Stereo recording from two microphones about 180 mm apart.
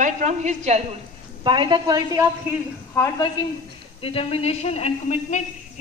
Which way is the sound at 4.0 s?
30° left (ahead or behind).